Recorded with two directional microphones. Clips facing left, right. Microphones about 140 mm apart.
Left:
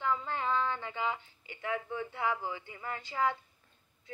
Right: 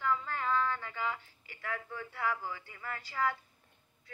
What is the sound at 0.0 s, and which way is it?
Speech, 25° left (ahead or behind).